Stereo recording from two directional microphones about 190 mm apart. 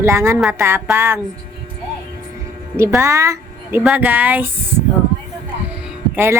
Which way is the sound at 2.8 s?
15° right (ahead or behind).